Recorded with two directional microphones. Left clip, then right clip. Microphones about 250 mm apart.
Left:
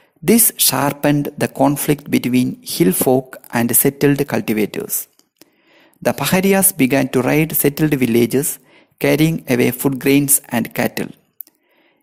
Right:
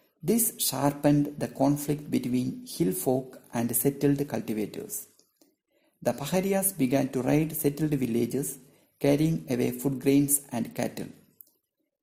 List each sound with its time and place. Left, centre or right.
0.3 s speech: left
6.0 s speech: left